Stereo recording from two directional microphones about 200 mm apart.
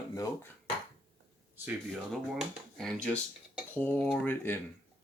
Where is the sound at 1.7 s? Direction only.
Centre (ahead or behind).